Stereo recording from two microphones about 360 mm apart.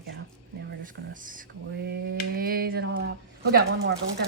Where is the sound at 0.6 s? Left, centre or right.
Right.